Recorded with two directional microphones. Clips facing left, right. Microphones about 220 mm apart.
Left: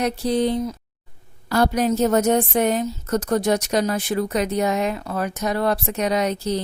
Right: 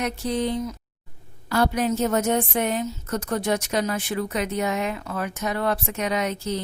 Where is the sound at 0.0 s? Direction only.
35° left (ahead or behind).